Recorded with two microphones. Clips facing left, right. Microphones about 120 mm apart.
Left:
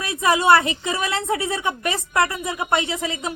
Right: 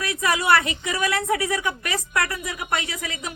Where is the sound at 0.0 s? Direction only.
25° left (ahead or behind).